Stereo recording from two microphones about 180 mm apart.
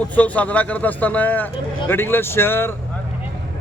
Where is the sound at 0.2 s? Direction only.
10° left (ahead or behind).